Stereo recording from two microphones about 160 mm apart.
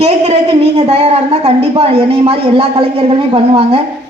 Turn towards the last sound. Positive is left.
turn(degrees=-35)  # may be behind; listen again after turning